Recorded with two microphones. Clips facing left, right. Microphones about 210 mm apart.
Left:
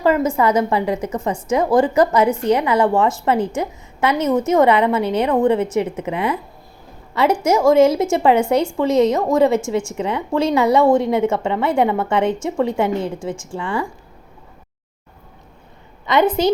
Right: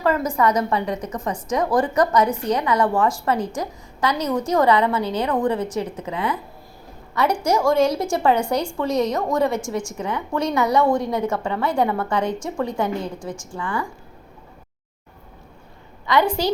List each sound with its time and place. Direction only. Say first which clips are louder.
0.0 s a woman's voice: left 4 dB; 25° left (ahead or behind)
7.4 s a woman's voice: left 6 dB; 20° left (ahead or behind)
16.0 s a woman's voice: left 4 dB; 20° left (ahead or behind)